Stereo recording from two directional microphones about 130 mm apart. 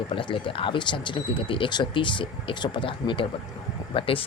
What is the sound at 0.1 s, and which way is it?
Speech, 40° left (ahead or behind).